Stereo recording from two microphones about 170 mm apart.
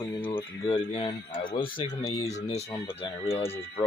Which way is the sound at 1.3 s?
55° left (ahead or behind).